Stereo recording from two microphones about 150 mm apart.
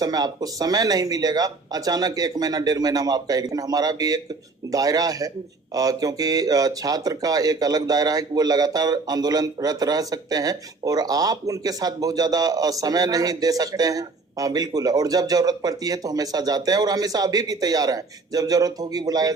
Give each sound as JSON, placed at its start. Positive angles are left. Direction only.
{"t": 0.0, "sound": "speech", "side_deg": -25}